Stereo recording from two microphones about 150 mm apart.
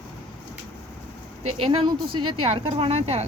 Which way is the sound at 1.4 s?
35° right (ahead or behind).